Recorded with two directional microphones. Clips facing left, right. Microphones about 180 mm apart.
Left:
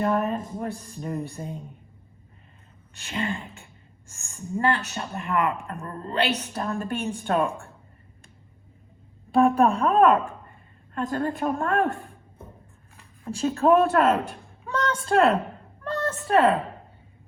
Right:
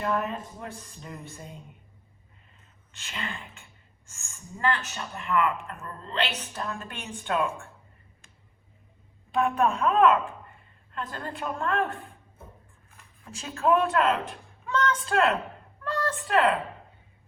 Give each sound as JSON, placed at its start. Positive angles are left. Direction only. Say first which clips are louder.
{"t": 0.0, "sound": "speech", "louder": "left 5 dB", "side_deg": 35}
{"t": 2.9, "sound": "speech", "louder": "left 8 dB", "side_deg": 35}
{"t": 9.3, "sound": "speech", "louder": "left 6 dB", "side_deg": 35}
{"t": 13.2, "sound": "a woman's voice", "louder": "left 5 dB", "side_deg": 35}